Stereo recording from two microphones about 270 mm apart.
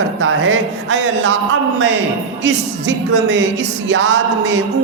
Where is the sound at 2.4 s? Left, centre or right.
Right.